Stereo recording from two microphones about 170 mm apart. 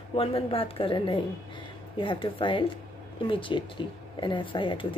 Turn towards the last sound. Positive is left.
turn(degrees=30)  # may be behind; listen again after turning